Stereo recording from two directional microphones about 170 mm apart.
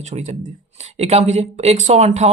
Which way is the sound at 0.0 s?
45° right (ahead or behind).